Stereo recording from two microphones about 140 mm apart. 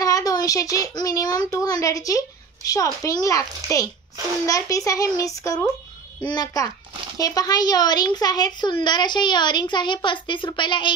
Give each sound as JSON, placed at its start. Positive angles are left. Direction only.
{"t": 0.0, "sound": "a child's voice", "side_deg": 25}